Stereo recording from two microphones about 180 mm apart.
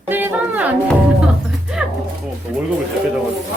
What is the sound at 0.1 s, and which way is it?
Music, 10° right (ahead or behind).